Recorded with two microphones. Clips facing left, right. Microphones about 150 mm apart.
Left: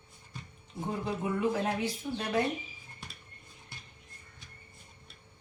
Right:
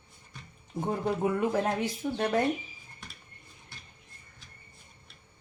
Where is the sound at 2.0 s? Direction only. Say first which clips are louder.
Right 4 dB; 50° right (ahead or behind).